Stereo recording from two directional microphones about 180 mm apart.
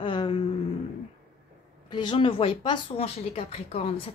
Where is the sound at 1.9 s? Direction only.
25° left (ahead or behind).